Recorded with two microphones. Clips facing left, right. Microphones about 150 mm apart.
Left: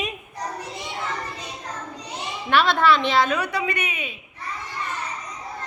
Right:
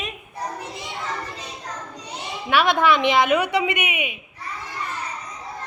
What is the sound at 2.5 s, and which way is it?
A woman's voice, 15° right (ahead or behind).